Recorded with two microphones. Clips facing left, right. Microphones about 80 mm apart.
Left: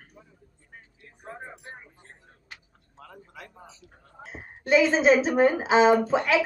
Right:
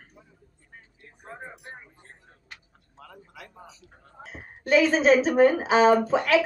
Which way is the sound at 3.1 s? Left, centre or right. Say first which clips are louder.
Left 1 dB; left.